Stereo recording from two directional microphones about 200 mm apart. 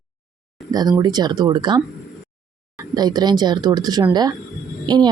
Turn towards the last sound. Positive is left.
turn(degrees=-20)  # may be behind; listen again after turning